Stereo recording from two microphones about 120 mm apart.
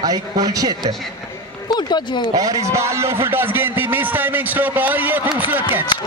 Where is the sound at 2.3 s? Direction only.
30° right (ahead or behind).